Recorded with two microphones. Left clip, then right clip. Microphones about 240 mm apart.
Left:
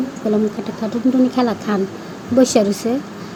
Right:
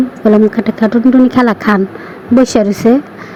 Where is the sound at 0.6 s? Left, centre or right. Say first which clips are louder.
Right 9 dB; right.